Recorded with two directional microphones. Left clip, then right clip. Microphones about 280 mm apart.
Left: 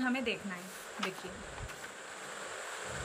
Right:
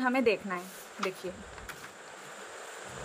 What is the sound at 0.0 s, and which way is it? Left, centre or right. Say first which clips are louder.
Speech: right 7 dB; centre.